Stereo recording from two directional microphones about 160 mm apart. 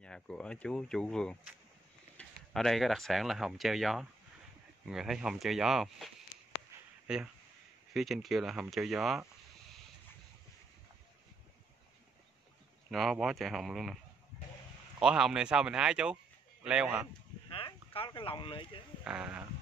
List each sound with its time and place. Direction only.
0.0 s speech: 5° left (ahead or behind)
7.1 s speech: 5° right (ahead or behind)
12.9 s speech: centre (ahead or behind)
15.0 s speech: 5° right (ahead or behind)
17.5 s a sound: 35° left (ahead or behind)
19.0 s speech: 10° right (ahead or behind)